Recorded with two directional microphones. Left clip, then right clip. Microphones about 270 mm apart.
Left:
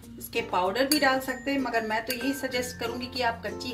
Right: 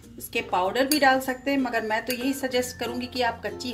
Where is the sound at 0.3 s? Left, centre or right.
Right.